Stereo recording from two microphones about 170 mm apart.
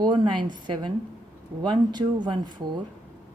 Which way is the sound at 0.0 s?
25° right (ahead or behind).